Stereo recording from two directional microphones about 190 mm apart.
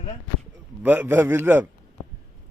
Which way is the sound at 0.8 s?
10° right (ahead or behind).